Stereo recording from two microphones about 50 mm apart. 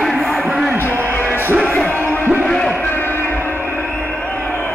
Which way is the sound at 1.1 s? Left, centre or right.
Left.